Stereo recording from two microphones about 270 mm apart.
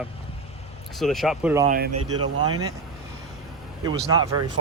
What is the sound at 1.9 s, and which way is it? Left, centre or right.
Speech, right.